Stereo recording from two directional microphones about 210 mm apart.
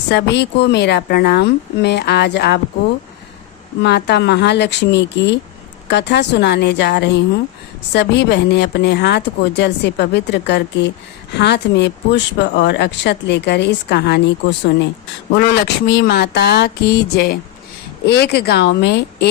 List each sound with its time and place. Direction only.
0.1 s a woman's voice: 55° left (ahead or behind)
3.8 s a woman's voice: 50° left (ahead or behind)